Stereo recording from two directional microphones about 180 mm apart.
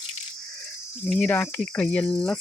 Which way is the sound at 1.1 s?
5° left (ahead or behind).